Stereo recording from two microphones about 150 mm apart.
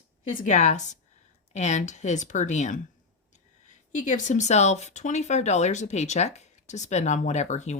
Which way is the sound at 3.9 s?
60° left (ahead or behind).